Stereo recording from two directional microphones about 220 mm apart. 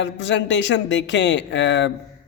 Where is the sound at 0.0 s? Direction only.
55° left (ahead or behind).